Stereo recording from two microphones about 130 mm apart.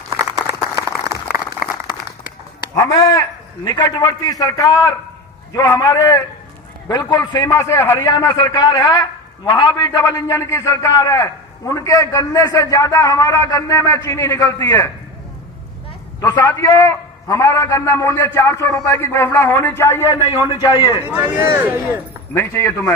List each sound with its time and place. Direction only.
0.1 s a sound: 25° right (ahead or behind)
2.7 s a man's voice: 25° left (ahead or behind)
16.2 s a man's voice: 25° left (ahead or behind)
21.0 s speech: 15° right (ahead or behind)
22.4 s a man's voice: 20° left (ahead or behind)